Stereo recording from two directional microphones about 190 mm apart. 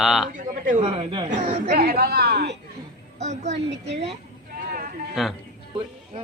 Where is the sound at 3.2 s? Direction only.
35° right (ahead or behind).